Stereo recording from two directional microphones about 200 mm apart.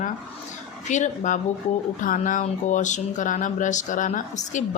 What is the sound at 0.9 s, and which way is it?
Speech, 40° left (ahead or behind).